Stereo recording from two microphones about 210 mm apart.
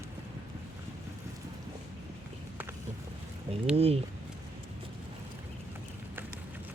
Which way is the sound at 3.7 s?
30° right (ahead or behind).